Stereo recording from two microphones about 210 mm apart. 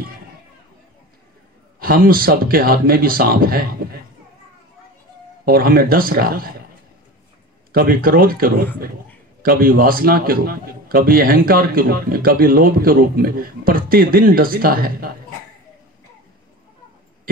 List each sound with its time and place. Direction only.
1.8 s a man's voice: 45° right (ahead or behind)
5.4 s a man's voice: 45° right (ahead or behind)
7.7 s a man's voice: 45° right (ahead or behind)